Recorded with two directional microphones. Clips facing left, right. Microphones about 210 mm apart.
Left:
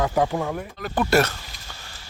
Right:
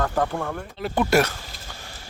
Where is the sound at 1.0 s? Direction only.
10° right (ahead or behind).